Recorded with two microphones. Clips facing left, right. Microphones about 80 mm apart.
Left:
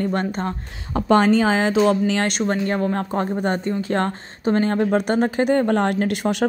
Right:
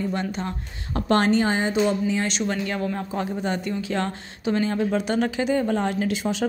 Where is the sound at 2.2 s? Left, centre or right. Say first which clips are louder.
Left 4 dB; left.